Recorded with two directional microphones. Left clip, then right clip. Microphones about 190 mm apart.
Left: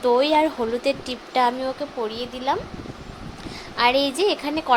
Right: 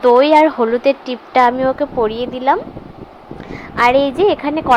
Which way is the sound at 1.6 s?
30° right (ahead or behind).